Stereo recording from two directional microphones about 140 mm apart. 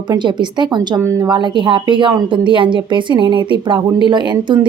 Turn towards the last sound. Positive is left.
turn(degrees=-35)  # may be behind; listen again after turning